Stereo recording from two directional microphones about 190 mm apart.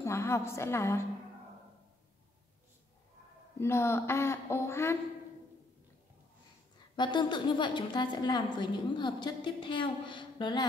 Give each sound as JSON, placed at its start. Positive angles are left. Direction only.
{"t": 0.0, "sound": "a woman's voice", "side_deg": 15}
{"t": 3.5, "sound": "a woman's voice", "side_deg": 15}
{"t": 7.0, "sound": "a woman's voice", "side_deg": 25}